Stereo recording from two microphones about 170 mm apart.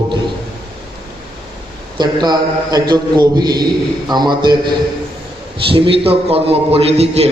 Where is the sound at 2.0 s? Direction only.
25° right (ahead or behind).